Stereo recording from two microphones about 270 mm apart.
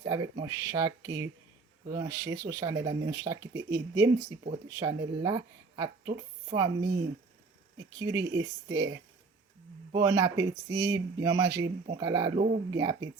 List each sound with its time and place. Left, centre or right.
0.0 s speech: centre
9.9 s speech: centre
12.4 s speech: right
12.7 s speech: centre